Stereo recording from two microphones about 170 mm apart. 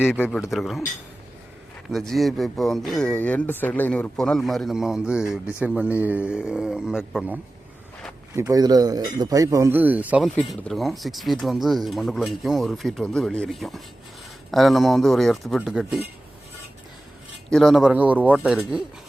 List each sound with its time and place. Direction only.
0.0 s speech: 10° left (ahead or behind)
1.9 s speech: centre (ahead or behind)
8.4 s speech: 20° right (ahead or behind)
10.2 s speech: 5° left (ahead or behind)
17.5 s speech: centre (ahead or behind)